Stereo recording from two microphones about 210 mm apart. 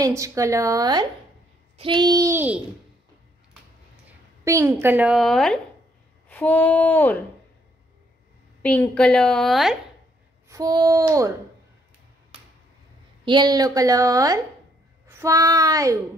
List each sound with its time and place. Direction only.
0.0 s a woman's voice: 15° right (ahead or behind)
4.5 s a woman's voice: 15° right (ahead or behind); by 7.2 s 10° left (ahead or behind)
8.6 s a woman's voice: 5° left (ahead or behind)
10.5 s a woman's voice: 15° right (ahead or behind)
13.2 s a woman's voice: 20° right (ahead or behind)